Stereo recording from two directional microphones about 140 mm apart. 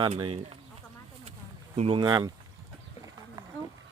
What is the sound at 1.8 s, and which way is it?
Speech, 35° right (ahead or behind).